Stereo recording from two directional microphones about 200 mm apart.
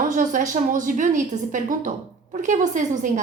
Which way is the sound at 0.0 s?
40° right (ahead or behind).